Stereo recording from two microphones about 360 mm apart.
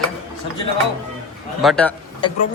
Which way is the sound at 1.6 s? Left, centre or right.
Centre.